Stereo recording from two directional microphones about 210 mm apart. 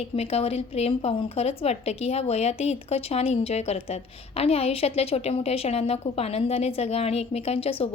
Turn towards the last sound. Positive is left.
turn(degrees=30)  # may be behind; listen again after turning